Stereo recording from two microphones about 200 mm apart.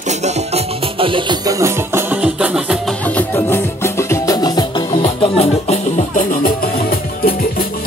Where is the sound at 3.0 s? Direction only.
10° left (ahead or behind).